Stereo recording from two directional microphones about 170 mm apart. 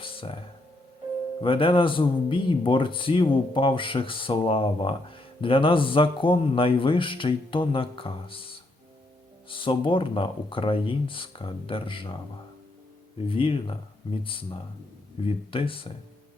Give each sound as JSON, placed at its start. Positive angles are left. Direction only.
{"t": 0.0, "sound": "a sound", "side_deg": 30}
{"t": 1.4, "sound": "speech", "side_deg": 30}
{"t": 13.2, "sound": "speech", "side_deg": 30}